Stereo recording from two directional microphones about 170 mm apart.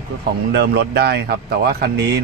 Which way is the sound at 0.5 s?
75° right (ahead or behind).